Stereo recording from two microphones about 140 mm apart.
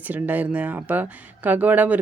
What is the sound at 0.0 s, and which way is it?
Speech, 10° right (ahead or behind).